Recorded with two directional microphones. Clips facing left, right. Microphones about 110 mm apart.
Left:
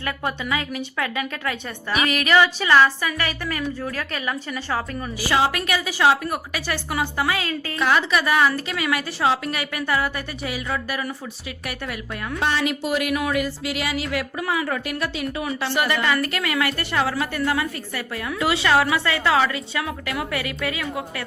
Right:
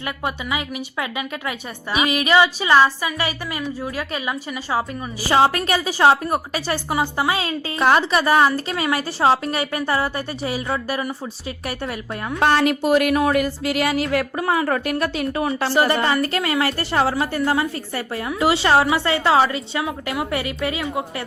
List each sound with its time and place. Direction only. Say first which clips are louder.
0.0 s a woman's voice: even; 10° right (ahead or behind)
5.3 s a woman's voice: right 4 dB; 35° right (ahead or behind)
7.8 s a woman's voice: right 4 dB; 40° right (ahead or behind)
12.4 s a woman's voice: right 6 dB; 50° right (ahead or behind); by 20.8 s 25° right (ahead or behind)